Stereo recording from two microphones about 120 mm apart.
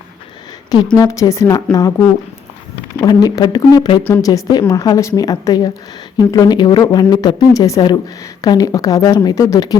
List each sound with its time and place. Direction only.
0.9 s speech: 25° left (ahead or behind)
3.0 s speech: 30° left (ahead or behind)